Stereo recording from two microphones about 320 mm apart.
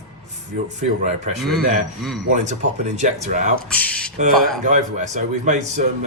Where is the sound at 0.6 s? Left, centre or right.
Right.